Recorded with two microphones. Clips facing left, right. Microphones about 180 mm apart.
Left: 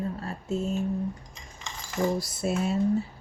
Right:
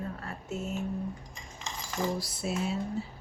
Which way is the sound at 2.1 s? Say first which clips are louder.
Left 5 dB; 50° left (ahead or behind).